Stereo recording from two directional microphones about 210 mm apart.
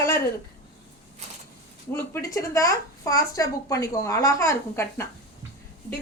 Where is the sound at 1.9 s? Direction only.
15° left (ahead or behind).